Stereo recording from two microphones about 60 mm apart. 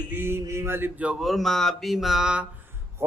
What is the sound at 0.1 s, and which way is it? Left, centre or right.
Male singing, right.